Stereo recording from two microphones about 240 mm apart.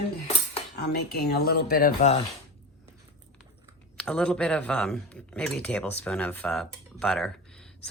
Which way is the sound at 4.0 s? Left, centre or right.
Centre.